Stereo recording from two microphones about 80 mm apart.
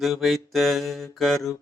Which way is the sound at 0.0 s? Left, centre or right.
Centre.